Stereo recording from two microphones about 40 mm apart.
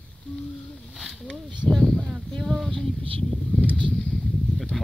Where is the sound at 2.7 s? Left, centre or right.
Centre.